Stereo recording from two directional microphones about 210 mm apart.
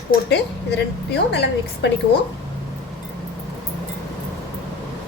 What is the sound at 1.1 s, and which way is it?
Speech, 50° left (ahead or behind).